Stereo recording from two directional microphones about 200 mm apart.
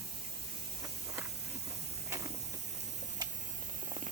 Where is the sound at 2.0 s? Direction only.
15° right (ahead or behind).